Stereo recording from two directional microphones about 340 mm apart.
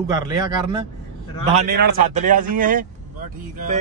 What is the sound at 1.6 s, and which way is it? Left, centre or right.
Speech, right.